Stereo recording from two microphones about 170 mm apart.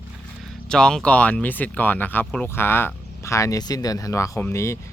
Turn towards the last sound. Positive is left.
turn(degrees=15)  # may be behind; listen again after turning